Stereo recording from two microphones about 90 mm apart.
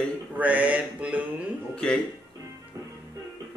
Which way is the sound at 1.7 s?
10° left (ahead or behind).